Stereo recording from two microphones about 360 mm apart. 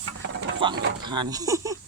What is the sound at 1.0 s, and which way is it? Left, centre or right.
Speech, centre.